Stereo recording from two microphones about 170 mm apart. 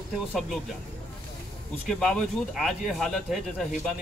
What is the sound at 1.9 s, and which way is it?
Speech, centre (ahead or behind).